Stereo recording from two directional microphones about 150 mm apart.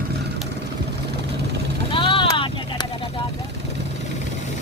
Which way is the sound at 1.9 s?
35° left (ahead or behind).